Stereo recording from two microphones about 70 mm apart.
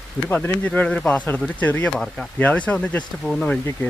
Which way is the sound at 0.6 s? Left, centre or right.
Centre.